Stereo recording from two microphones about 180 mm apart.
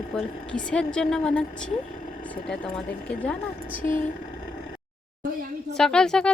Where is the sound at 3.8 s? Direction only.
45° left (ahead or behind).